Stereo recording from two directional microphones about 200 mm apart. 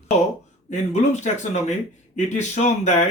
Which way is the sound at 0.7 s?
35° left (ahead or behind).